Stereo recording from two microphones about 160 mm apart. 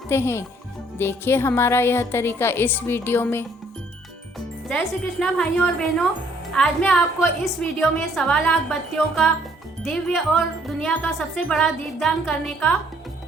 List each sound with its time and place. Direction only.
0.1 s a woman's voice: 15° left (ahead or behind)
5.2 s music: 5° left (ahead or behind)